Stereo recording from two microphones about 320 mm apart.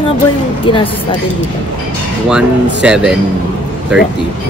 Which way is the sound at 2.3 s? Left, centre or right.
Centre.